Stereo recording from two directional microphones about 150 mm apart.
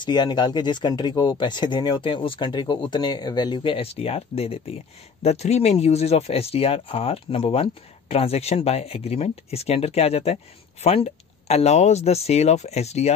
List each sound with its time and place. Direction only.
0.0 s speech: 30° left (ahead or behind); by 13.1 s 45° left (ahead or behind)